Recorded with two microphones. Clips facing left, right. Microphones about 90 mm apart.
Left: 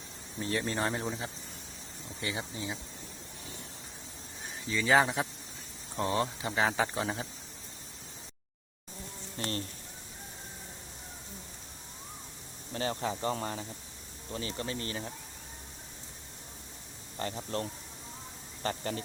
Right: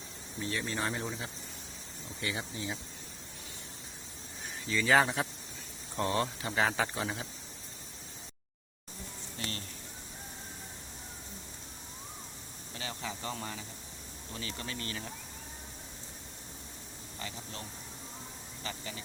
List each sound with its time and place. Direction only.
0.3 s speech: 40° left (ahead or behind)
2.2 s speech: 25° left (ahead or behind)
4.7 s speech: 15° left (ahead or behind)
6.9 s speech: 30° left (ahead or behind)
9.4 s speech: 35° left (ahead or behind)
12.7 s speech: 40° left (ahead or behind)
17.2 s speech: 45° left (ahead or behind)